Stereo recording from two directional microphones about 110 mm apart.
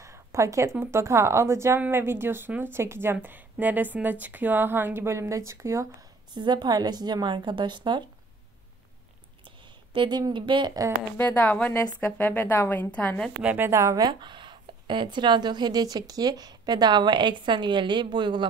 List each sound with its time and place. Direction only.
0.0 s a sound: 25° right (ahead or behind)
0.7 s speech: 25° right (ahead or behind)
6.3 s a woman's voice: 40° right (ahead or behind)
9.9 s a woman's voice: 40° right (ahead or behind)
11.1 s a woman's voice: 15° left (ahead or behind)
13.4 s a woman's voice: 10° right (ahead or behind)
13.7 s speech: 30° right (ahead or behind)